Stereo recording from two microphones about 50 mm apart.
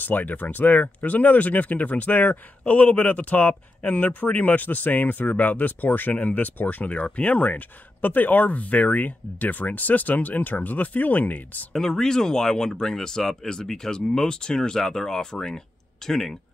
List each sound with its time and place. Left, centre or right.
0.0 s speech: left
11.7 s speech: centre